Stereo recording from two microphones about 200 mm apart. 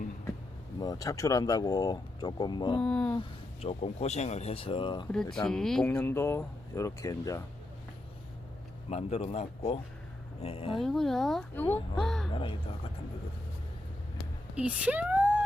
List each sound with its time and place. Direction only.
0.8 s speech: 20° left (ahead or behind)
2.8 s speech: 5° left (ahead or behind)
3.2 s speech: 30° left (ahead or behind)
5.1 s speech: 5° left (ahead or behind)
8.9 s speech: 30° left (ahead or behind)
10.8 s speech: centre (ahead or behind)
12.3 s speech: 25° left (ahead or behind)
14.5 s speech: 5° right (ahead or behind)